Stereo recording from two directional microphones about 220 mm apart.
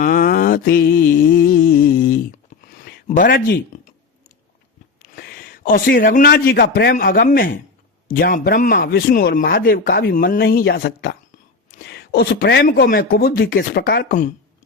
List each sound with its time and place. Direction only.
0.0 s mantra: 40° left (ahead or behind)
3.1 s speech: 40° left (ahead or behind)
5.1 s a man's voice: 45° left (ahead or behind)